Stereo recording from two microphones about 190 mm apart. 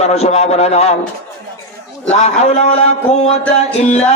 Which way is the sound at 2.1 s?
35° left (ahead or behind).